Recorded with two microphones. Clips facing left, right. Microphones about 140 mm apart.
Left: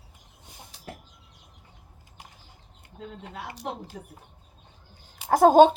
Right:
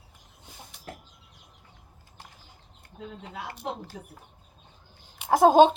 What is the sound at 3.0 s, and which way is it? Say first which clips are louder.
Speech: even; 50° left (ahead or behind).